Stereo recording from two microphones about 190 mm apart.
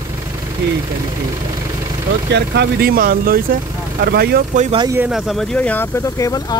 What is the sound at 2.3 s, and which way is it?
Speech, 60° right (ahead or behind).